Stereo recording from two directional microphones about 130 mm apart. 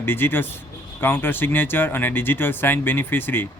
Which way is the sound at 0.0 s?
15° left (ahead or behind).